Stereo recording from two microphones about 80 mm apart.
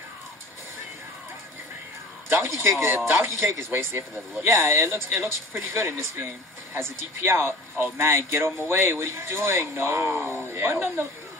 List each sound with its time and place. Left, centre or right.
2.2 s a man's voice: right